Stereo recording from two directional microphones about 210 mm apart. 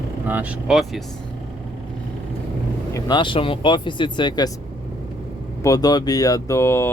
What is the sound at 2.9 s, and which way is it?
Speech, 20° left (ahead or behind).